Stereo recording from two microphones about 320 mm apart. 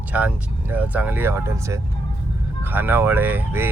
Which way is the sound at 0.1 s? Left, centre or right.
Centre.